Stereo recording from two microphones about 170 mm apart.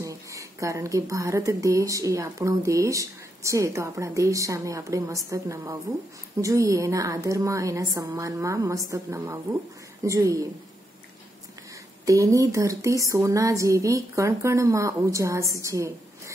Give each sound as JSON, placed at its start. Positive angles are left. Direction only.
{"t": 0.0, "sound": "a woman's voice", "side_deg": -20}
{"t": 12.1, "sound": "a woman's voice", "side_deg": -20}